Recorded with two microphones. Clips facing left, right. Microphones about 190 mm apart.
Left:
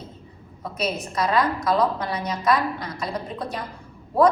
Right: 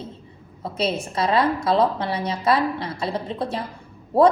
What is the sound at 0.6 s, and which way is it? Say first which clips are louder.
A woman's voice: right 3 dB; 30° right (ahead or behind).